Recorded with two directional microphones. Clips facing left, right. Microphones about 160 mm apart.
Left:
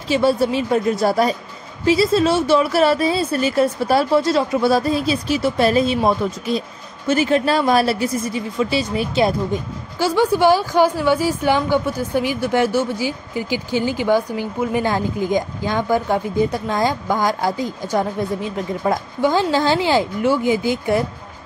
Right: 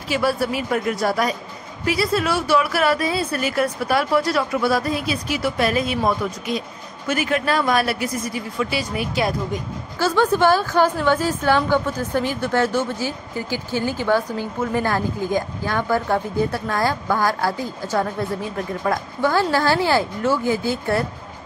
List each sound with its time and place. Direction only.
0.1 s a woman's voice: 25° left (ahead or behind)
9.9 s a woman's voice: 15° left (ahead or behind)